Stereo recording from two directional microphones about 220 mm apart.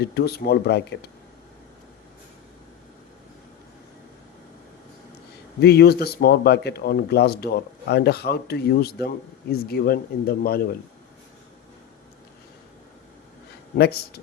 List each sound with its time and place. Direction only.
0.0 s speech: 45° left (ahead or behind)
5.5 s speech: 45° left (ahead or behind)
13.7 s speech: 45° left (ahead or behind)